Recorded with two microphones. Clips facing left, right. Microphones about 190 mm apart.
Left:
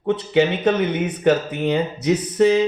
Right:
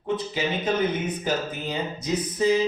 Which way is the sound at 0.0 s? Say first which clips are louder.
Left 9 dB; 70° left (ahead or behind).